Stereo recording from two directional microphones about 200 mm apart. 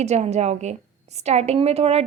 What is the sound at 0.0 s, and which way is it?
A woman's voice, 35° right (ahead or behind).